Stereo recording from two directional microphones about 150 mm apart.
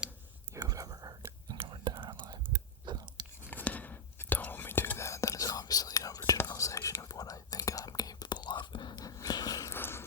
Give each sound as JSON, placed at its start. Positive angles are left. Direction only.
{"t": 0.5, "sound": "whispering", "side_deg": -25}
{"t": 2.8, "sound": "chewing", "side_deg": -30}
{"t": 3.5, "sound": "whispering", "side_deg": 10}